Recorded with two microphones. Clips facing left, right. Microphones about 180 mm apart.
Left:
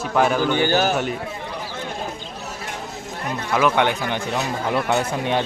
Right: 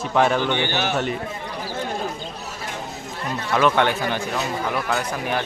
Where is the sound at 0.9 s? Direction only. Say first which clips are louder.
Left 1 dB; 5° left (ahead or behind).